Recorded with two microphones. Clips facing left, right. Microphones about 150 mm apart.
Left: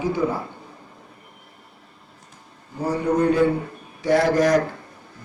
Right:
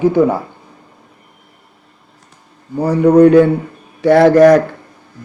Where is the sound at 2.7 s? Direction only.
70° right (ahead or behind).